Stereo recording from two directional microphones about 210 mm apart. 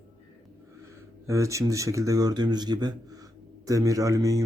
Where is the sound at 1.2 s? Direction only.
15° right (ahead or behind).